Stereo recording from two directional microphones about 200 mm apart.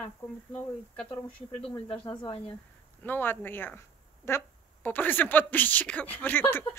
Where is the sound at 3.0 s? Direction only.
10° left (ahead or behind).